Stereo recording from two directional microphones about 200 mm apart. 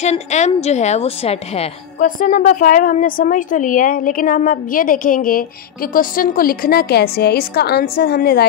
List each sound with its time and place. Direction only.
0.0 s a woman's voice: 35° left (ahead or behind); by 8.5 s 50° left (ahead or behind)